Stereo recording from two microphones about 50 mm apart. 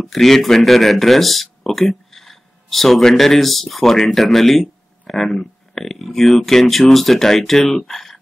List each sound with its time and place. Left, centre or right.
0.0 s speech: centre